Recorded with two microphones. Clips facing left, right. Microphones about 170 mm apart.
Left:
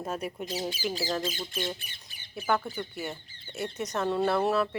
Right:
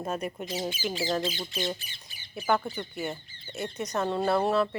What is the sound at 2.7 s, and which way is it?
Speech, centre (ahead or behind).